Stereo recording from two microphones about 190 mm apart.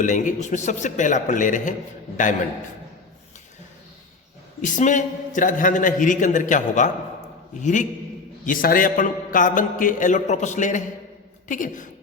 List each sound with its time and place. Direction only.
0.0 s a man's voice: 40° left (ahead or behind)
4.6 s a man's voice: 40° left (ahead or behind)